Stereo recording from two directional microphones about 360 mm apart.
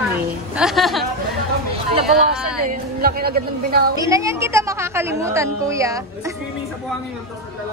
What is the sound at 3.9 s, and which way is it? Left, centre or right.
Speech, centre.